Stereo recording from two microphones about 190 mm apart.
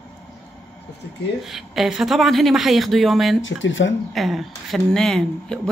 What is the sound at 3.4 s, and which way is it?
Speech, 80° left.